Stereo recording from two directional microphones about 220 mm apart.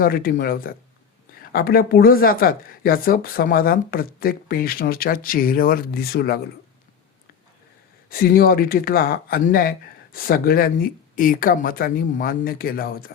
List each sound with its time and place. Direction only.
0.0 s speech: 40° left (ahead or behind)
8.1 s speech: 40° left (ahead or behind)